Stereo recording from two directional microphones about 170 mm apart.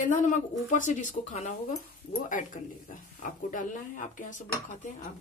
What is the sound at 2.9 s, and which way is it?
Speech, 50° left (ahead or behind).